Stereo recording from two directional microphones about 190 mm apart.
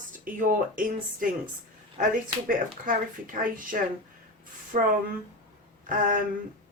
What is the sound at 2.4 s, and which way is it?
Speech, 45° right (ahead or behind).